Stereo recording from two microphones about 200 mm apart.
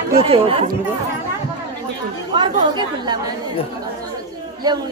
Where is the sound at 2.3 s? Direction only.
20° right (ahead or behind).